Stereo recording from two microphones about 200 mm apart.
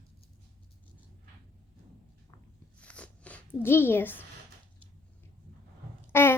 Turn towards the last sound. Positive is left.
turn(degrees=10)  # may be behind; listen again after turning